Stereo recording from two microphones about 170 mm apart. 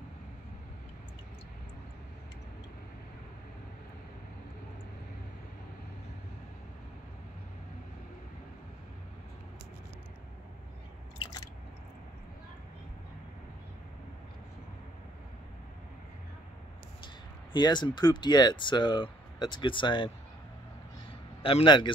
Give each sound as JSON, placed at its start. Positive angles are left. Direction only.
{"t": 17.5, "sound": "speech", "side_deg": 25}
{"t": 21.4, "sound": "a man's voice", "side_deg": 30}